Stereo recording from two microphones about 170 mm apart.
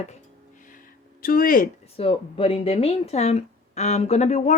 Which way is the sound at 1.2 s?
55° left (ahead or behind).